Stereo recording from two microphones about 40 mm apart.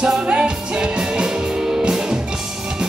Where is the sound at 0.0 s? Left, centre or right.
Right.